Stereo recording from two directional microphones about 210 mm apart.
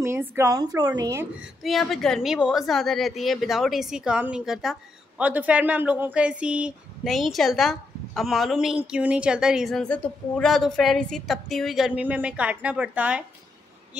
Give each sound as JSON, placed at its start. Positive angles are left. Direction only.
{"t": 0.0, "sound": "a woman's voice", "side_deg": -10}
{"t": 1.4, "sound": "a woman's voice", "side_deg": 0}